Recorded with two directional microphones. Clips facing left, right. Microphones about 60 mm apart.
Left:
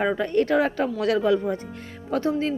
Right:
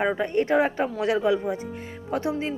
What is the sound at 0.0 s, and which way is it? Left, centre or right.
A woman's voice, centre.